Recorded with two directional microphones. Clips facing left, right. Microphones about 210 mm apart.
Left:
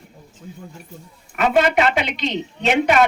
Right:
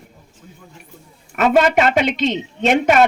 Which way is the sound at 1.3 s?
45° right (ahead or behind).